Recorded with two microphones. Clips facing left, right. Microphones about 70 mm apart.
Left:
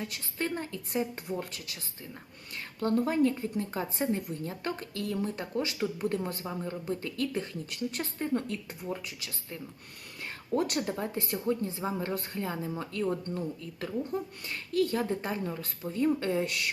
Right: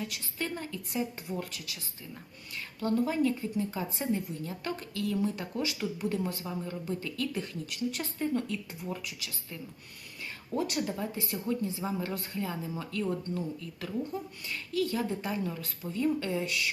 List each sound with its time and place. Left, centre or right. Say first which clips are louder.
0.1 s speech: left 2 dB; left
2.8 s speech: left 2 dB; left
10.5 s speech: left 2 dB; left